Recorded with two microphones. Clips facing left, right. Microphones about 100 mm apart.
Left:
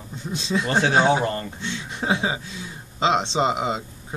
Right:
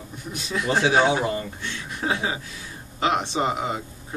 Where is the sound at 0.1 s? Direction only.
25° left (ahead or behind).